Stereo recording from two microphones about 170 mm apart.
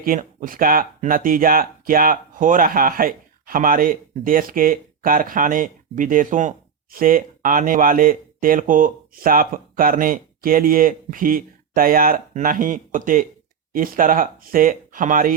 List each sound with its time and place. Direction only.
0.0 s speech: 50° right (ahead or behind)